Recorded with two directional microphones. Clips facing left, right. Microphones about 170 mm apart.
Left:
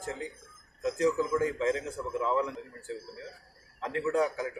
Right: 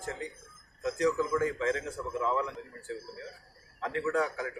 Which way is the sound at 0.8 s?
20° left (ahead or behind).